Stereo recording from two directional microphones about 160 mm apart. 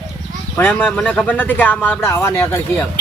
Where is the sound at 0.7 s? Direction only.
Centre (ahead or behind).